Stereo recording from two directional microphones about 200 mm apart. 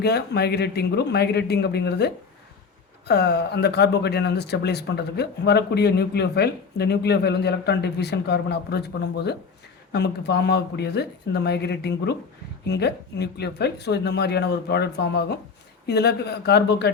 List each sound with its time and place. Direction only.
0.0 s speech: 55° left (ahead or behind)